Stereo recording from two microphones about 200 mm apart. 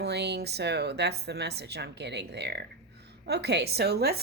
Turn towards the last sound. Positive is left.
turn(degrees=-55)  # may be behind; listen again after turning